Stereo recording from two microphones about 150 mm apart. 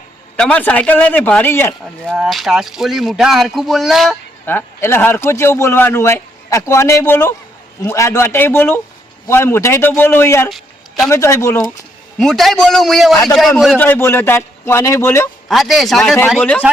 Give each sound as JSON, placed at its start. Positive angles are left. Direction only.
{"t": 0.3, "sound": "a man's voice", "side_deg": 10}
{"t": 2.1, "sound": "speech", "side_deg": 0}
{"t": 4.4, "sound": "a man's voice", "side_deg": 15}
{"t": 10.5, "sound": "a sound", "side_deg": 0}
{"t": 11.1, "sound": "speech", "side_deg": 20}
{"t": 12.2, "sound": "speech", "side_deg": 0}
{"t": 13.7, "sound": "a man's voice", "side_deg": 15}
{"t": 15.4, "sound": "a man's voice", "side_deg": 0}